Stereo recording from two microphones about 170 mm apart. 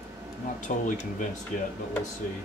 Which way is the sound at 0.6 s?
45° left (ahead or behind).